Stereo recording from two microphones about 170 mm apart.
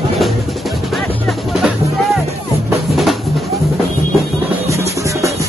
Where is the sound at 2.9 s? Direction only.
Centre (ahead or behind).